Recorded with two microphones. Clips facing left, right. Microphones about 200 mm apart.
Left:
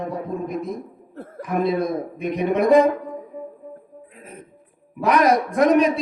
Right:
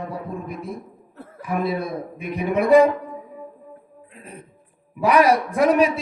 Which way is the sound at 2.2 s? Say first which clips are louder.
Left 1 dB; 5° right (ahead or behind).